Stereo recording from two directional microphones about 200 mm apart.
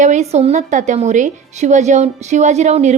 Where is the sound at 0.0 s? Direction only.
35° right (ahead or behind).